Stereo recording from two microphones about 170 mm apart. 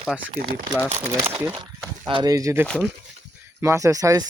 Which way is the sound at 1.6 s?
30° right (ahead or behind).